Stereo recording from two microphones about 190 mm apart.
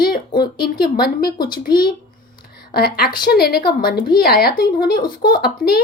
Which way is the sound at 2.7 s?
55° left (ahead or behind).